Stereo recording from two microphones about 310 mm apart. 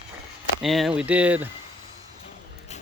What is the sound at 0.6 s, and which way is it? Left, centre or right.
Speech, centre.